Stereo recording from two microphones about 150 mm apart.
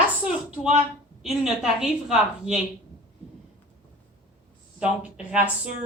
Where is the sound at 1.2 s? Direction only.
5° right (ahead or behind).